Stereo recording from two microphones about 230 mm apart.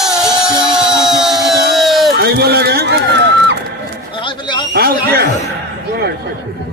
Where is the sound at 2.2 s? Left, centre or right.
Right.